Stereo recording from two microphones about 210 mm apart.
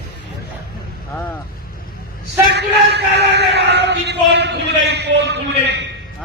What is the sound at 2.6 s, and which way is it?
Speech, 55° right (ahead or behind).